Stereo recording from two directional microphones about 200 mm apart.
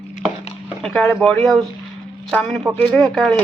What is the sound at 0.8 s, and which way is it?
Speech, centre (ahead or behind).